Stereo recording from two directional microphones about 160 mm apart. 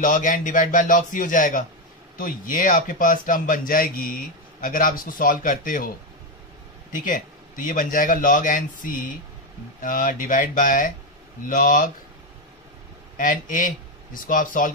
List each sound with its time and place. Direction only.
0.0 s speech: 55° left (ahead or behind)
6.9 s speech: 55° left (ahead or behind)
13.2 s speech: 55° left (ahead or behind)